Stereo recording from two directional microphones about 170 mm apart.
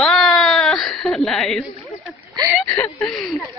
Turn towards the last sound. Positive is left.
turn(degrees=0)  # may be behind; listen again after turning